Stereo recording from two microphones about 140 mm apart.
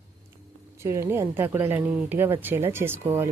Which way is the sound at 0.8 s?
20° right (ahead or behind).